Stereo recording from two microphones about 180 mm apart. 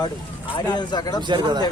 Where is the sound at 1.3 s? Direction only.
25° right (ahead or behind).